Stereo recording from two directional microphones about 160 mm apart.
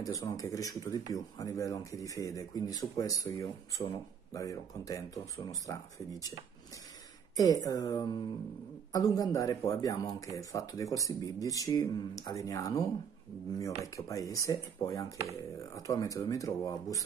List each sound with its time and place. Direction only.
0.0 s speech: 20° left (ahead or behind)
7.3 s speech: 20° left (ahead or behind)
13.9 s speech: 20° left (ahead or behind)